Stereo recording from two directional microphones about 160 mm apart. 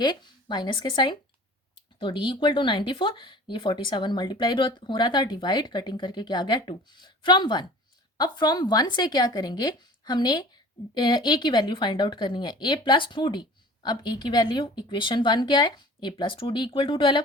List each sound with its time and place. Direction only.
0.0 s speech: 25° left (ahead or behind)